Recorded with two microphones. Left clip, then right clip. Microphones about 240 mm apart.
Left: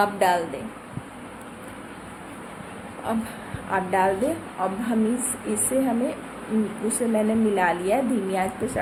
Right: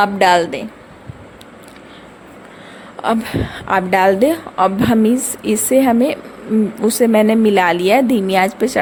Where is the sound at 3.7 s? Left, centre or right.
Right.